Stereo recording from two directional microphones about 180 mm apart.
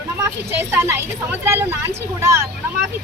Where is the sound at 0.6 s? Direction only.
15° right (ahead or behind).